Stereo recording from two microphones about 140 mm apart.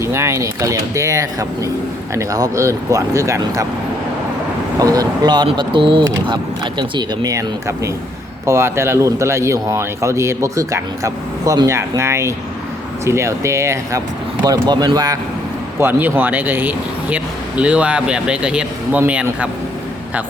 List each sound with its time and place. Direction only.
0.0 s speech: 20° right (ahead or behind)
4.8 s speech: 25° right (ahead or behind)
15.8 s speech: 15° right (ahead or behind)